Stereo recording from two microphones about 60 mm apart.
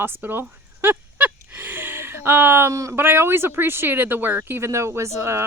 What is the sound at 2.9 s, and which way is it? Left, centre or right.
Speech, right.